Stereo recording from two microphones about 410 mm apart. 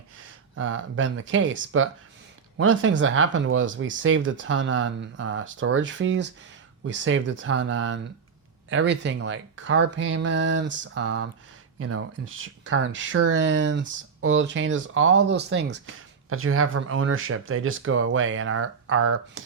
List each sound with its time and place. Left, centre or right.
0.5 s speech: right